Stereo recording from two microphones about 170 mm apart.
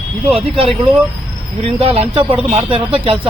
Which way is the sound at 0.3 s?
30° right (ahead or behind).